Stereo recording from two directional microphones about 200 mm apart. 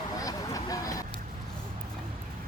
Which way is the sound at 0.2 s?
15° left (ahead or behind).